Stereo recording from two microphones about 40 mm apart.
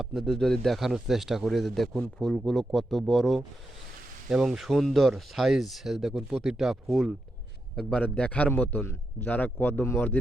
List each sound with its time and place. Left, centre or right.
0.0 s speech: centre
0.3 s speech: centre
0.7 s speech: centre
4.3 s speech: centre
6.8 s speech: centre
7.9 s a man's voice: left
8.4 s a man's voice: left